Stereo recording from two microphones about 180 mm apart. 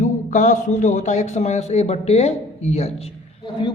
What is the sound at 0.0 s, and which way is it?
A woman's voice, 45° left (ahead or behind).